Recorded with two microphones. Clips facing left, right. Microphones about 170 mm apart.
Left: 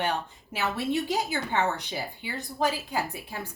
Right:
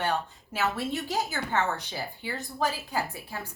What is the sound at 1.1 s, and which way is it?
A woman's voice, 15° left (ahead or behind).